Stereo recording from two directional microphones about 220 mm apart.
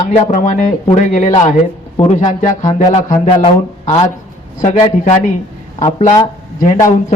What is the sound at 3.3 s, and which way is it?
A man's voice, 25° left (ahead or behind).